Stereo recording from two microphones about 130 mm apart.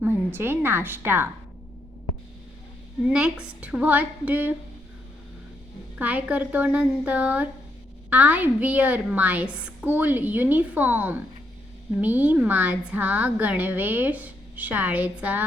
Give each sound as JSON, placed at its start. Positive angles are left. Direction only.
{"t": 0.0, "sound": "a woman's voice", "side_deg": -15}
{"t": 3.1, "sound": "a woman's voice", "side_deg": -5}
{"t": 6.0, "sound": "a woman's voice", "side_deg": -10}